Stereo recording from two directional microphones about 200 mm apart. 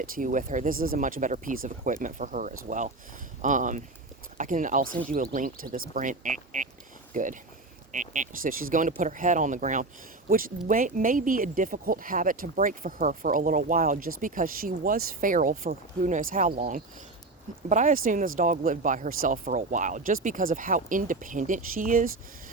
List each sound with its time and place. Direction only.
0.0 s speech: 45° right (ahead or behind)